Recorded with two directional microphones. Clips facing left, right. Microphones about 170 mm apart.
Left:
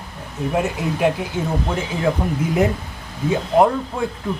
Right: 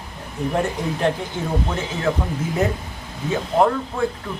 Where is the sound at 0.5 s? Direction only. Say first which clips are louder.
Left 2 dB; 10° left (ahead or behind).